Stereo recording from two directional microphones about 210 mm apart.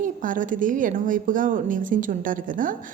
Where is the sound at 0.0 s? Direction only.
40° right (ahead or behind).